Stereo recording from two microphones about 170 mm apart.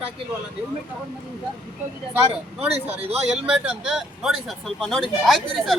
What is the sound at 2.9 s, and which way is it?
Speech, 35° right (ahead or behind).